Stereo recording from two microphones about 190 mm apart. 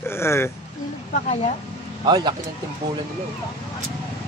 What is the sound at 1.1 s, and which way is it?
Speech, 35° left (ahead or behind).